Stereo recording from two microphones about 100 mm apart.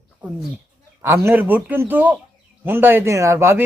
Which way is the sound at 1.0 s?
25° right (ahead or behind).